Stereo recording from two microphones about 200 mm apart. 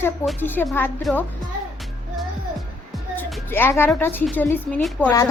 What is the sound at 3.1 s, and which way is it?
Music, 10° left (ahead or behind).